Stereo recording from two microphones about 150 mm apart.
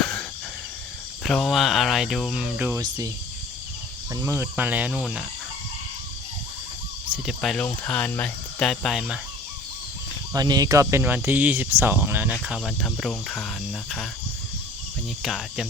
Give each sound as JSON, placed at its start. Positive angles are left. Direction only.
{"t": 0.0, "sound": "a sound", "side_deg": 5}
{"t": 1.2, "sound": "speech", "side_deg": 0}
{"t": 2.7, "sound": "speech", "side_deg": -20}
{"t": 4.1, "sound": "speech", "side_deg": -20}
{"t": 7.1, "sound": "speech", "side_deg": 0}
{"t": 10.3, "sound": "speech", "side_deg": -25}
{"t": 15.2, "sound": "speech", "side_deg": 0}